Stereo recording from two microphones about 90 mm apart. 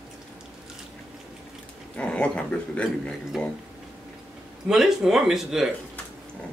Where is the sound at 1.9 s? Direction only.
15° left (ahead or behind).